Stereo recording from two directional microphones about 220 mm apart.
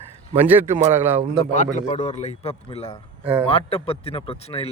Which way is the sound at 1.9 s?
30° left (ahead or behind).